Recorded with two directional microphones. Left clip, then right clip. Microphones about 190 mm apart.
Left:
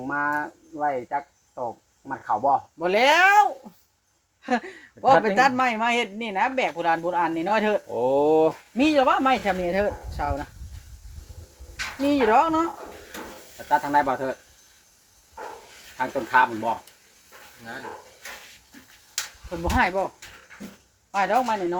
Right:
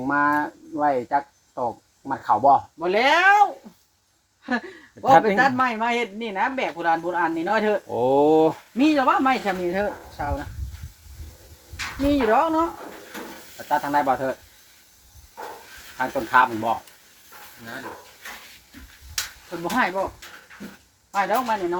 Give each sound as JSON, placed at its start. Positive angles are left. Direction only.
{"t": 0.0, "sound": "speech", "side_deg": -20}
{"t": 2.7, "sound": "speech", "side_deg": 55}
{"t": 7.9, "sound": "speech", "side_deg": -15}
{"t": 8.8, "sound": "speech", "side_deg": 50}
{"t": 12.0, "sound": "speech", "side_deg": 50}
{"t": 13.7, "sound": "speech", "side_deg": 5}
{"t": 16.0, "sound": "speech", "side_deg": 5}
{"t": 19.5, "sound": "speech", "side_deg": 50}
{"t": 21.2, "sound": "speech", "side_deg": 60}